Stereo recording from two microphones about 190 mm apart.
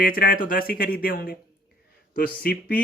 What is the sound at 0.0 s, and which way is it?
Speech, 50° left (ahead or behind).